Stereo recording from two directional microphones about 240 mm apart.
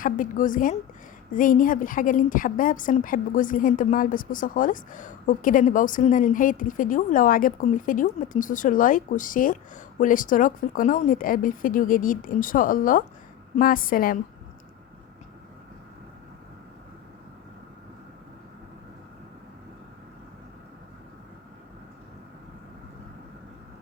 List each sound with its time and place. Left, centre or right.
0.0 s a woman's voice: left